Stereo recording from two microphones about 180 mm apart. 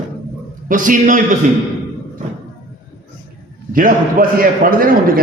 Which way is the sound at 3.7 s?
50° right (ahead or behind).